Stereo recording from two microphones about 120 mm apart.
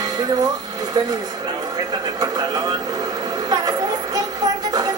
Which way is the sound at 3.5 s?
30° right (ahead or behind).